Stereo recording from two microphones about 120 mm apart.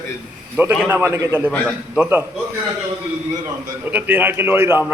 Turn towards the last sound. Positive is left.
turn(degrees=-20)  # may be behind; listen again after turning